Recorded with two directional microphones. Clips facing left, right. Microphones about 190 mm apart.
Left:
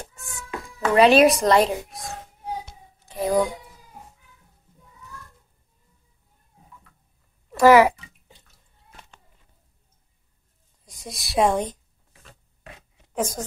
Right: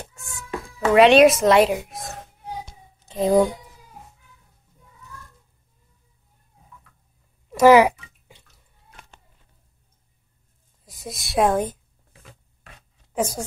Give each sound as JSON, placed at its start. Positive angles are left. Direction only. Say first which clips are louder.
{"t": 0.1, "sound": "insect", "louder": "even", "side_deg": 0}
{"t": 0.9, "sound": "a woman's voice", "louder": "right 2 dB", "side_deg": 0}
{"t": 3.1, "sound": "speech", "louder": "right 4 dB", "side_deg": -25}
{"t": 7.4, "sound": "a sound", "louder": "right 1 dB", "side_deg": -20}
{"t": 10.9, "sound": "a woman's voice", "louder": "right 3 dB", "side_deg": -5}
{"t": 13.1, "sound": "speech", "louder": "right 2 dB", "side_deg": -10}